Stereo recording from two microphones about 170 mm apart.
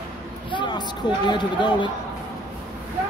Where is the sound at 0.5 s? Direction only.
25° left (ahead or behind).